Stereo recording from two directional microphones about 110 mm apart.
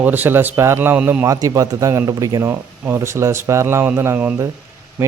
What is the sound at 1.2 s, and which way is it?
Speech, 30° right (ahead or behind).